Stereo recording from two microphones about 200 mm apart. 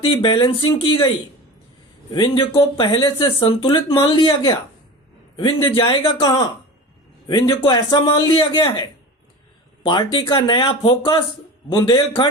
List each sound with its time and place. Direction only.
0.0 s speech: 25° left (ahead or behind)
2.1 s speech: 25° left (ahead or behind)
5.7 s speech: 25° left (ahead or behind)